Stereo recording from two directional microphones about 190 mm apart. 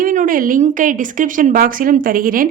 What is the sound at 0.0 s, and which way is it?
A woman's voice, 45° right (ahead or behind).